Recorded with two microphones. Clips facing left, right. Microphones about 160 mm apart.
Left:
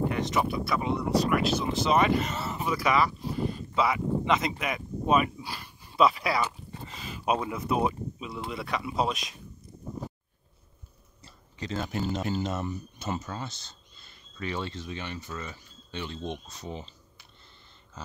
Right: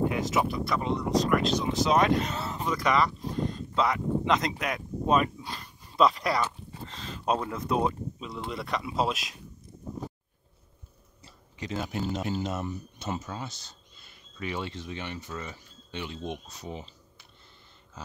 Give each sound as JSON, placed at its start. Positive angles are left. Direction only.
{"t": 0.1, "sound": "speech", "side_deg": -5}
{"t": 11.2, "sound": "a sound", "side_deg": -15}
{"t": 11.9, "sound": "speech", "side_deg": 0}